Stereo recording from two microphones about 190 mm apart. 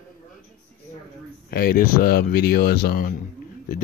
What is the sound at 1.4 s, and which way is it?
Speech, 50° left (ahead or behind).